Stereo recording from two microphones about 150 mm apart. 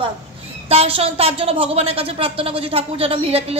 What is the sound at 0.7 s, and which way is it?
A woman's voice, 40° right (ahead or behind).